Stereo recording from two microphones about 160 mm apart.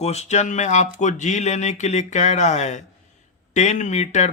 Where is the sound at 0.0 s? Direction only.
40° left (ahead or behind).